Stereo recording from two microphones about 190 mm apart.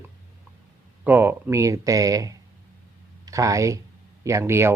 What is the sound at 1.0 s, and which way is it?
Speech, 10° right (ahead or behind).